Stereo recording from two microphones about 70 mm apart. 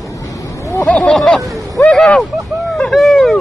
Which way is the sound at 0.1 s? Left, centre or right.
Left.